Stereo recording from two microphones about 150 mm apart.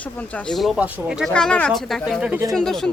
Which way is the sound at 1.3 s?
5° left (ahead or behind).